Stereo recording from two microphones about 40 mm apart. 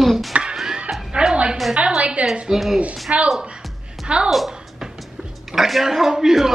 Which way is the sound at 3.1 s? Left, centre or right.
Right.